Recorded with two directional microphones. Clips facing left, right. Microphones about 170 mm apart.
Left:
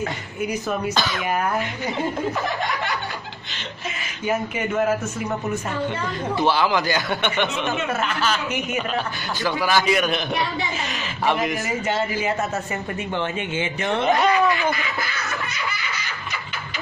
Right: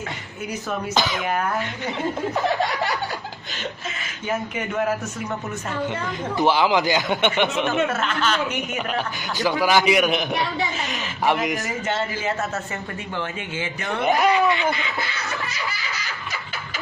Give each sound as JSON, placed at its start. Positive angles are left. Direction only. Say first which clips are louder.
{"t": 0.9, "sound": "speech", "louder": "right 1 dB", "side_deg": -20}
{"t": 4.3, "sound": "speech", "louder": "left 3 dB", "side_deg": 5}
{"t": 6.3, "sound": "a man's voice", "louder": "right 2 dB", "side_deg": -15}
{"t": 7.6, "sound": "speech", "louder": "right 2 dB", "side_deg": 10}
{"t": 8.9, "sound": "a man's voice", "louder": "even", "side_deg": -20}
{"t": 11.9, "sound": "speech", "louder": "left 2 dB", "side_deg": 10}
{"t": 13.2, "sound": "speech", "louder": "left 2 dB", "side_deg": 25}
{"t": 14.2, "sound": "laughter", "louder": "even", "side_deg": -20}